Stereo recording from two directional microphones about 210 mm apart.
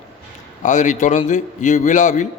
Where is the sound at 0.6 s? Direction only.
35° left (ahead or behind).